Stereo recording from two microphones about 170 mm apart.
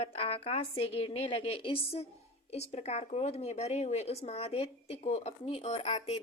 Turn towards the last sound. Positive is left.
turn(degrees=40)  # may be behind; listen again after turning